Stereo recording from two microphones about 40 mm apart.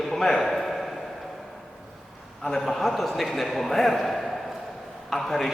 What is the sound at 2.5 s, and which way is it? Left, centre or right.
A man's voice, centre.